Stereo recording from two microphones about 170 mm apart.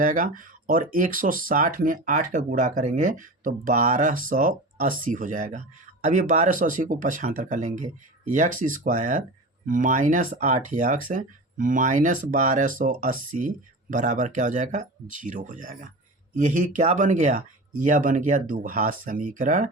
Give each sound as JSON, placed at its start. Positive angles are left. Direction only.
{"t": 0.0, "sound": "speech", "side_deg": -50}